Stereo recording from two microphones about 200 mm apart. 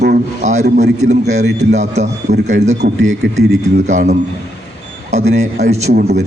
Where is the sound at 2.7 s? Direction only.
65° right (ahead or behind).